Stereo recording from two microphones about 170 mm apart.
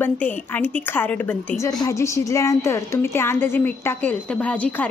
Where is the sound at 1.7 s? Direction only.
20° left (ahead or behind).